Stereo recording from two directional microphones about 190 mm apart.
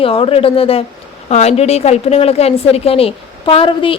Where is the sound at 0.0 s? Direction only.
30° left (ahead or behind).